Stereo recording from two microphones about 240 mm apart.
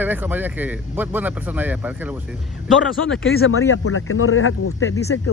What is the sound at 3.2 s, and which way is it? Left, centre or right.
Speech, left.